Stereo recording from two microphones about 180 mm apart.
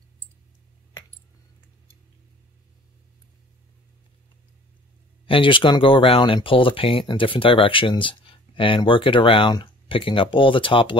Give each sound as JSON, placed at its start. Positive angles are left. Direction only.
{"t": 5.2, "sound": "speech", "side_deg": 30}